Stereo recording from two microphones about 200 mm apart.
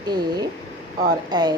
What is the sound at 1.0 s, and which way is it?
Speech, 20° right (ahead or behind).